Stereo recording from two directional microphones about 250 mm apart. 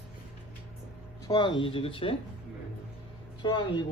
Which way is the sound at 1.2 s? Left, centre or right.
Centre.